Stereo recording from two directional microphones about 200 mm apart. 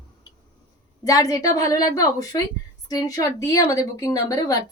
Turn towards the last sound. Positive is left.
turn(degrees=20)  # may be behind; listen again after turning